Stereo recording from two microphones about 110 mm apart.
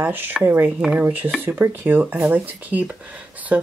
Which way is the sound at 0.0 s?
15° right (ahead or behind).